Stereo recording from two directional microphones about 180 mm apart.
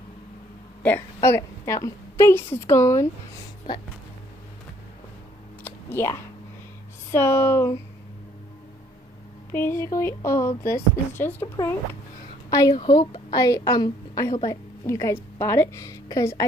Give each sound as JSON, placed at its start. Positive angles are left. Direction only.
{"t": 0.8, "sound": "speech", "side_deg": 15}
{"t": 5.6, "sound": "a sound", "side_deg": 10}
{"t": 7.1, "sound": "speech", "side_deg": 15}
{"t": 9.5, "sound": "a woman's voice", "side_deg": 15}